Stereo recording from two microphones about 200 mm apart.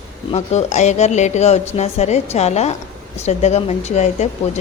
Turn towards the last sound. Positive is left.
turn(degrees=35)  # may be behind; listen again after turning